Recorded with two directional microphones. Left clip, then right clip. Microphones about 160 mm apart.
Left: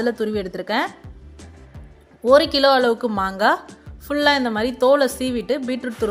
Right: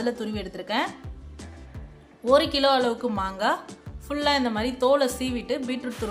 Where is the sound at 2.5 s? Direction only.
30° left (ahead or behind).